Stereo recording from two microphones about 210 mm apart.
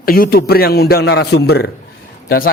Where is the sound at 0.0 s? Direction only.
45° left (ahead or behind).